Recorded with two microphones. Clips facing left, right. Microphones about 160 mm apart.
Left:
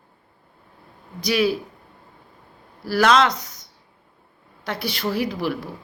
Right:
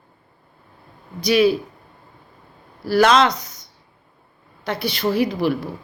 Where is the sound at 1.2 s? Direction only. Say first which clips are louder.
Right 5 dB; 5° left (ahead or behind).